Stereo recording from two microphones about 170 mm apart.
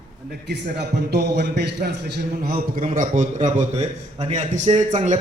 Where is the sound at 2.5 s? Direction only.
50° right (ahead or behind).